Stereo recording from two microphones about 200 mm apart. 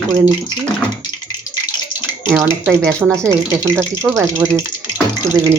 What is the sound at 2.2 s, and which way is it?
Speech, 10° right (ahead or behind).